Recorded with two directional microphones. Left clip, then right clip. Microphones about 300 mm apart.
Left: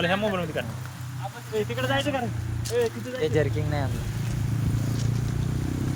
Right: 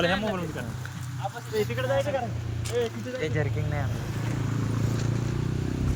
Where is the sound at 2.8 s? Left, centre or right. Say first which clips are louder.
Left 3 dB; left.